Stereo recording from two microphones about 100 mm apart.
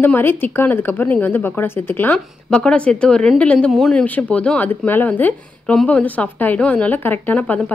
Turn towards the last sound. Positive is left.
turn(degrees=15)  # may be behind; listen again after turning